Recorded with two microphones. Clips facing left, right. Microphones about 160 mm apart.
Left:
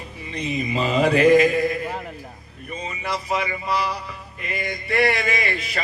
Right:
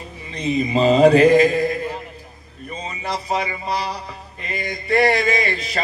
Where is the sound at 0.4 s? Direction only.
35° right (ahead or behind).